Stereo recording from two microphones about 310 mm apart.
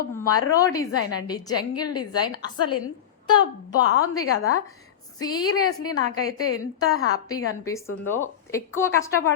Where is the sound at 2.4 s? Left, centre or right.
Centre.